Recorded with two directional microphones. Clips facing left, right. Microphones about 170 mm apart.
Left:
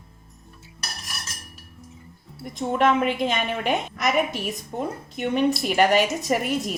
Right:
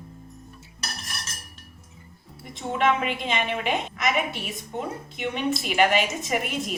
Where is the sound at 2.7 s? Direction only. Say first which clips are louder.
Left 2 dB; 45° left (ahead or behind).